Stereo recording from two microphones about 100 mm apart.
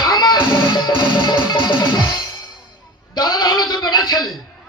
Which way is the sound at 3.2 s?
40° left (ahead or behind).